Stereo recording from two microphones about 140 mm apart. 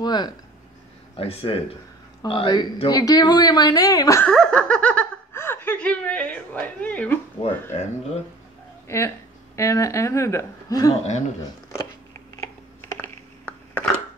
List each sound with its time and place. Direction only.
0.0 s a sound: 30° left (ahead or behind)
1.1 s speech: 45° left (ahead or behind); by 4.2 s 25° left (ahead or behind)
4.2 s speech: 5° left (ahead or behind)
8.8 s speech: 20° left (ahead or behind)
11.0 s speech: 55° left (ahead or behind)
12.4 s a sound: 20° left (ahead or behind)